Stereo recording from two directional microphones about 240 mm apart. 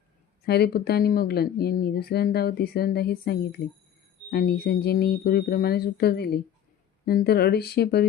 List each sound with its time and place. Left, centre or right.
0.4 s speech: left